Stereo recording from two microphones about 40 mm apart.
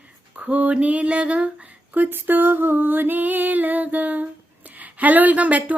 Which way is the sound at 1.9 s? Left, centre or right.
Right.